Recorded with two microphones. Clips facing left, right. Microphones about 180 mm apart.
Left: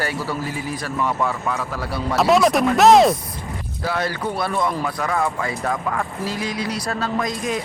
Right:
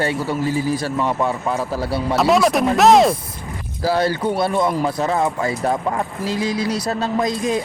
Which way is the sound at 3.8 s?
30° right (ahead or behind).